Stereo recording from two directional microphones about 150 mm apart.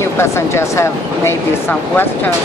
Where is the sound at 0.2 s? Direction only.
15° left (ahead or behind).